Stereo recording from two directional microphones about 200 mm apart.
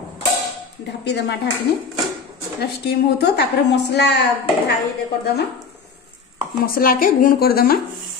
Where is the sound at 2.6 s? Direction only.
55° left (ahead or behind).